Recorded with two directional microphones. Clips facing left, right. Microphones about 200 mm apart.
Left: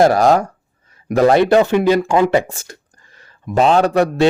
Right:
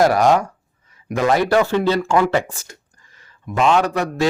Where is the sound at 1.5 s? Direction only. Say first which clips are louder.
Left 4 dB; 20° left (ahead or behind).